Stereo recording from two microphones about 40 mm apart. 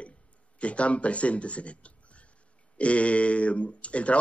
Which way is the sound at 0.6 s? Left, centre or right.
Left.